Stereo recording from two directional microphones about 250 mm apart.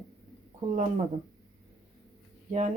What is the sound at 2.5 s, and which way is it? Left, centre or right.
Speech, right.